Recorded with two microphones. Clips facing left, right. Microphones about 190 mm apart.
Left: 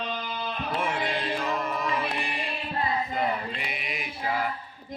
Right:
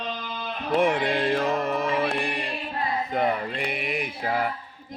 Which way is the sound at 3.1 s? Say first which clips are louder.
Right 4 dB; 55° right (ahead or behind).